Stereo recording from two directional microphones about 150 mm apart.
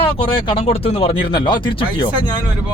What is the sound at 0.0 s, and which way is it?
Speech, 35° left (ahead or behind).